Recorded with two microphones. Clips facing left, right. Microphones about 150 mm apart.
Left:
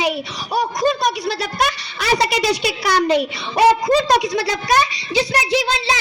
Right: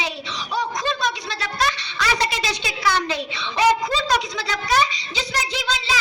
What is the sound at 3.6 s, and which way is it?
Speech, 35° left (ahead or behind).